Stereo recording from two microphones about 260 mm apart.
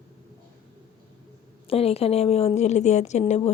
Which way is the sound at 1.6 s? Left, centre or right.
Left.